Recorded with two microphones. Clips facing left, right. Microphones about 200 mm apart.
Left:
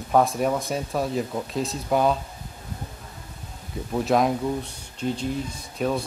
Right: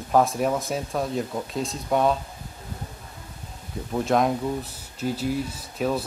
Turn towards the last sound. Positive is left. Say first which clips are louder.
# even
turn(degrees=-5)  # may be behind; listen again after turning